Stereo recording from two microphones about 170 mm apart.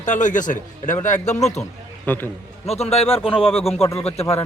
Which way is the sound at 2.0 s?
10° left (ahead or behind).